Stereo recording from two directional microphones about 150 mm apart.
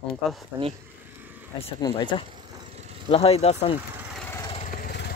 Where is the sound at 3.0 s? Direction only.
40° left (ahead or behind).